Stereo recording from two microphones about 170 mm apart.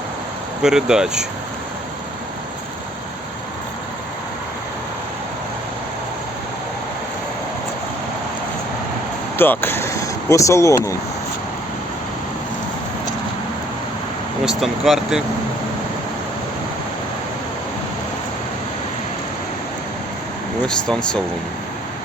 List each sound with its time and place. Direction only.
0.6 s speech: 5° right (ahead or behind)
9.4 s speech: 10° left (ahead or behind)
14.4 s speech: centre (ahead or behind)
20.7 s speech: 5° left (ahead or behind)